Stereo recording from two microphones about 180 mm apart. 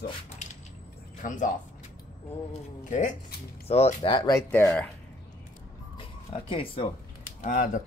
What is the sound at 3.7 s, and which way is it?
Speech, 35° left (ahead or behind).